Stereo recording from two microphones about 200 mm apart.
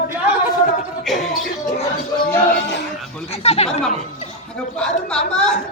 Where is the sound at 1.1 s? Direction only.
Centre (ahead or behind).